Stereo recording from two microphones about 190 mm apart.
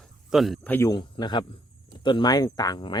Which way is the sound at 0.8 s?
20° left (ahead or behind).